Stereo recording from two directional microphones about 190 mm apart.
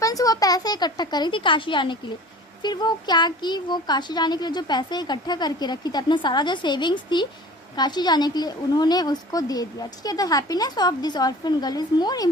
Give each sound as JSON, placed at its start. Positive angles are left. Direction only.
{"t": 0.0, "sound": "speech", "side_deg": 20}